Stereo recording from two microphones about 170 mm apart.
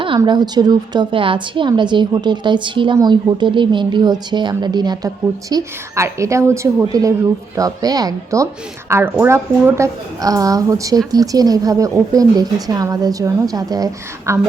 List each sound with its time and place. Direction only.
0.2 s a woman's voice: 25° right (ahead or behind)